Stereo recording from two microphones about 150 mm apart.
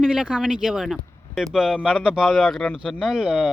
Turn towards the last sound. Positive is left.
turn(degrees=-5)  # may be behind; listen again after turning